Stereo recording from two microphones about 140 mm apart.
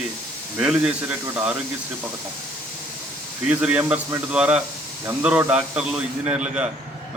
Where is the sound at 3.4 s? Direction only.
10° right (ahead or behind).